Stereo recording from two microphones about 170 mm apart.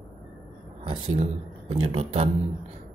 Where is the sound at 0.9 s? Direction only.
40° right (ahead or behind).